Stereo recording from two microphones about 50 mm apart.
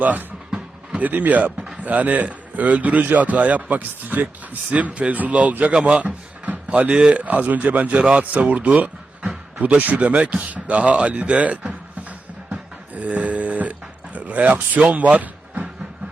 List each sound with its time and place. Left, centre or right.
0.0 s speech: right
5.7 s speech: centre
6.0 s speech: right
10.2 s speech: right
11.7 s a sound: right